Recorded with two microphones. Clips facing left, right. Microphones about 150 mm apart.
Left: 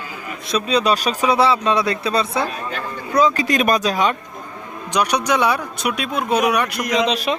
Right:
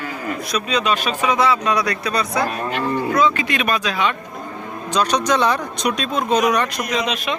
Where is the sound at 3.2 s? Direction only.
40° left (ahead or behind).